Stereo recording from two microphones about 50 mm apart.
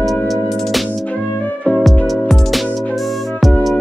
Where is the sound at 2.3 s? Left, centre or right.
Centre.